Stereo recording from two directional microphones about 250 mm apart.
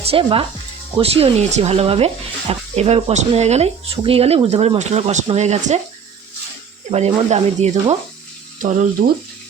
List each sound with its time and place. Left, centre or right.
0.0 s speech: right
6.9 s speech: right